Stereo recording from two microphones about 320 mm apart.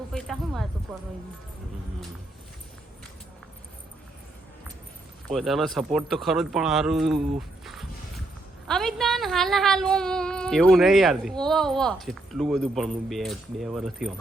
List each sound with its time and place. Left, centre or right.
0.1 s a woman's voice: centre
5.3 s a woman's voice: centre